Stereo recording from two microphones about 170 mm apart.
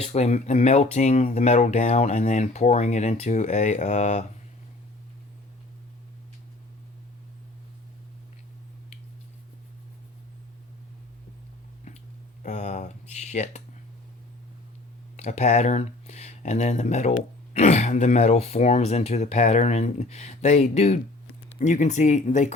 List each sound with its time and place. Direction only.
0.0 s speech: 40° left (ahead or behind)
12.4 s a sound: 45° left (ahead or behind)
15.1 s speech: 40° left (ahead or behind)